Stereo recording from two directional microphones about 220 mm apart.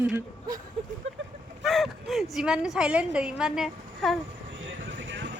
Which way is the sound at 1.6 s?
Centre (ahead or behind).